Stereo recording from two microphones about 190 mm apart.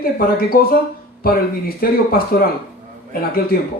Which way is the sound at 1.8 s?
50° left (ahead or behind).